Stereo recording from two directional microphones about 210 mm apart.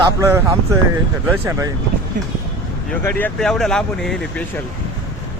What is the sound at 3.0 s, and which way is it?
Speech, 5° left (ahead or behind).